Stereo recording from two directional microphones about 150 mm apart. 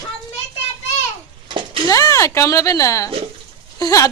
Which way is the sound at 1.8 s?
25° left (ahead or behind).